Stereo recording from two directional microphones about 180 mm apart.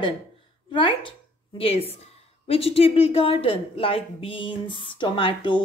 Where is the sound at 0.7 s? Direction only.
25° left (ahead or behind).